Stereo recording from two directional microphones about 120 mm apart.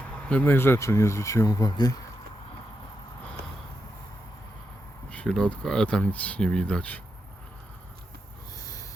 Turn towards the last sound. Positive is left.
turn(degrees=10)  # may be behind; listen again after turning